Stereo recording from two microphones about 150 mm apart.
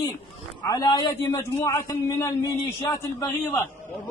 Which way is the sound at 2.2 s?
20° left (ahead or behind).